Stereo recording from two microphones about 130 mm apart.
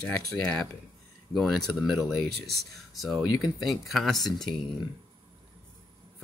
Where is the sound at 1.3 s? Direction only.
Centre (ahead or behind).